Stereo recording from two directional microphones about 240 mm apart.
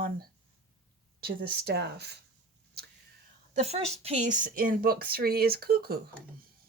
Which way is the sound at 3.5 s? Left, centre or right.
Right.